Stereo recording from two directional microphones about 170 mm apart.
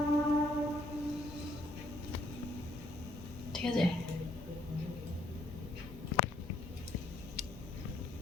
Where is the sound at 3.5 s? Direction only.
5° left (ahead or behind).